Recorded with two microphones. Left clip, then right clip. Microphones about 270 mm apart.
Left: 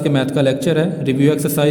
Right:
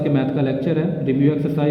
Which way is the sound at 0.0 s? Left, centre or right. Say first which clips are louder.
Left 4 dB; left.